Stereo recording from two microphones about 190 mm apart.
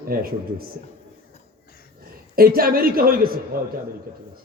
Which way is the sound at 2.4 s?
50° right (ahead or behind).